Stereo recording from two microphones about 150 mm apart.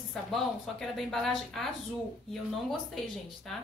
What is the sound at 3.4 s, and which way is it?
Speech, centre (ahead or behind).